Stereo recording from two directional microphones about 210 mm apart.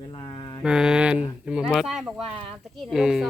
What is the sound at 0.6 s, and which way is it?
Mantra, 5° right (ahead or behind).